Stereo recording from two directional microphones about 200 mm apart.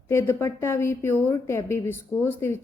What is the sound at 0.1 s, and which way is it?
A woman's voice, 15° left (ahead or behind).